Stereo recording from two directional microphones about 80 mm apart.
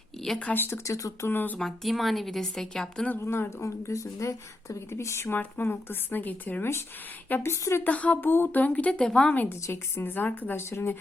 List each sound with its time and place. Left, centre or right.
0.2 s speech: centre
0.4 s speech: left
0.9 s speech: left
1.3 s speech: left
1.5 s a woman's voice: centre
3.2 s speech: left
7.9 s a woman's voice: centre
9.3 s speech: left
9.6 s speech: left